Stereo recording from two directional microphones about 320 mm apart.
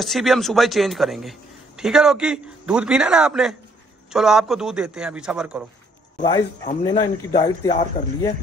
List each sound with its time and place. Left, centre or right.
0.0 s a man's voice: centre
6.1 s speech: centre